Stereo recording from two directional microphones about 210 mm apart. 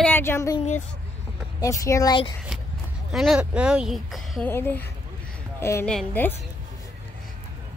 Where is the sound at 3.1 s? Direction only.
5° right (ahead or behind).